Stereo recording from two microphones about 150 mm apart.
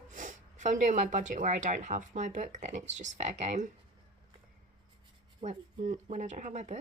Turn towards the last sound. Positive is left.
turn(degrees=-50)  # may be behind; listen again after turning